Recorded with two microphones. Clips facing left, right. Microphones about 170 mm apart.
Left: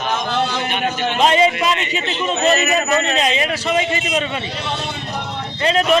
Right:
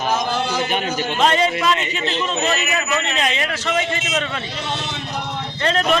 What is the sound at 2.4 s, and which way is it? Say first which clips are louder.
Speech: left 5 dB; 40° left (ahead or behind).